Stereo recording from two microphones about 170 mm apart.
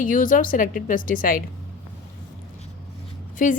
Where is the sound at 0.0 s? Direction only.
55° left (ahead or behind).